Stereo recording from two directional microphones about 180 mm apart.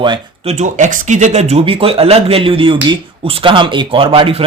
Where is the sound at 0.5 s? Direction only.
40° right (ahead or behind).